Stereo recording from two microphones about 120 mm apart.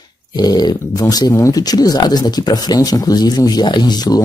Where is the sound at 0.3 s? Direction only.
35° left (ahead or behind).